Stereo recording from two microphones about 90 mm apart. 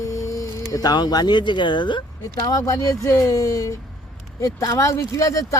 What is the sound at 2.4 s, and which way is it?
A man's voice, 40° left (ahead or behind).